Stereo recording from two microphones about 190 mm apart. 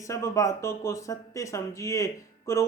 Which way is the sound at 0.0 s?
15° left (ahead or behind).